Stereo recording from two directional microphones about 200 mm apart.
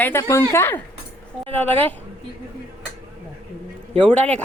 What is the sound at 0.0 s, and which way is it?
A woman's voice, 15° left (ahead or behind).